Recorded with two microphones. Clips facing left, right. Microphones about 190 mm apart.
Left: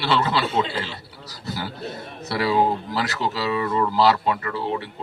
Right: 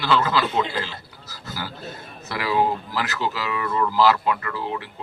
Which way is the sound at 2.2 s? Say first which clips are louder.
Left 2 dB; 35° left (ahead or behind).